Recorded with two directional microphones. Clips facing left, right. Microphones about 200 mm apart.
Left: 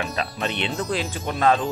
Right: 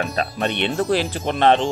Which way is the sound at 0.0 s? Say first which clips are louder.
Right 4 dB; 40° right (ahead or behind).